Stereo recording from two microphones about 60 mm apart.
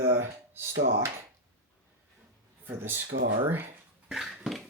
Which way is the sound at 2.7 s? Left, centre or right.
Right.